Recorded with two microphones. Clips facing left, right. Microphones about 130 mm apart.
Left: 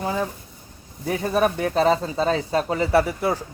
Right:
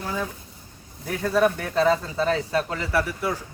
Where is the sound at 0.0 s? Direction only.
20° left (ahead or behind).